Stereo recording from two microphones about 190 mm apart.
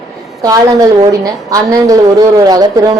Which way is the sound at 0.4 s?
20° right (ahead or behind).